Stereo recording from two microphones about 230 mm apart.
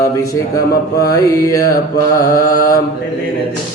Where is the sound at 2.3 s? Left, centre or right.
Left.